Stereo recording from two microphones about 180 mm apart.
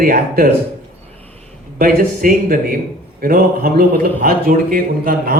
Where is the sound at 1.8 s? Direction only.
50° right (ahead or behind).